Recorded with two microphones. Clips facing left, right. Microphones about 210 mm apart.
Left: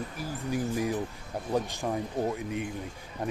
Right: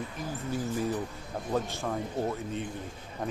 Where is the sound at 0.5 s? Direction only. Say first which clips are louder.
Left 2 dB; 15° left (ahead or behind).